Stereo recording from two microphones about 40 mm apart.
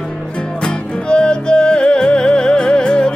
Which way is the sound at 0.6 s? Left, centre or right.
Left.